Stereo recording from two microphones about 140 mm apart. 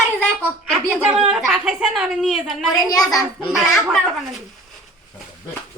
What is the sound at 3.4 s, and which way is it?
Speech, centre (ahead or behind).